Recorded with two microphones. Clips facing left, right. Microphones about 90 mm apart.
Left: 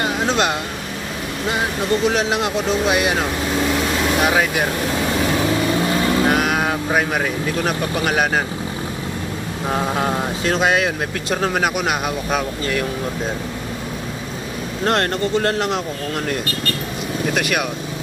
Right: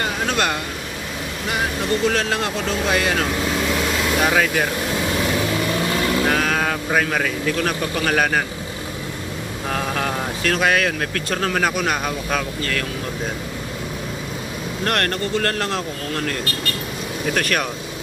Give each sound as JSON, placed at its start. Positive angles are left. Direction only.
{"t": 0.0, "sound": "vehicle", "side_deg": 20}
{"t": 2.0, "sound": "speech", "side_deg": 15}
{"t": 6.2, "sound": "speech", "side_deg": 15}
{"t": 9.7, "sound": "speech", "side_deg": 20}
{"t": 14.9, "sound": "speech", "side_deg": 25}
{"t": 17.3, "sound": "speech", "side_deg": 10}